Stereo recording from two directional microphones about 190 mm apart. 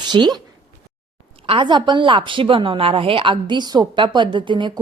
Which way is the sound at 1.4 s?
25° right (ahead or behind).